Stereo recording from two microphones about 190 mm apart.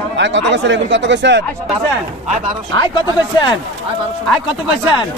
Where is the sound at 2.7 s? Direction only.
25° left (ahead or behind).